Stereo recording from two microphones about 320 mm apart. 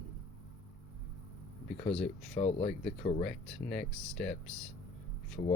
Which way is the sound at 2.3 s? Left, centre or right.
Centre.